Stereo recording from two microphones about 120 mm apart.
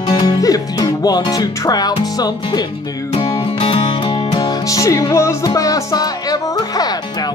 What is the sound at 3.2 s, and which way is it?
Music, 50° left (ahead or behind).